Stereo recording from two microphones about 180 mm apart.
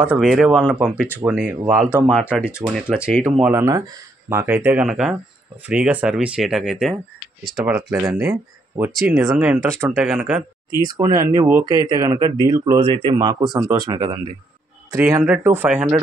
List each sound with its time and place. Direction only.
0.0 s speech: 5° right (ahead or behind)
3.6 s speech: 15° right (ahead or behind)
8.2 s speech: 15° right (ahead or behind)
10.8 s speech: 20° right (ahead or behind); by 16.0 s 5° right (ahead or behind)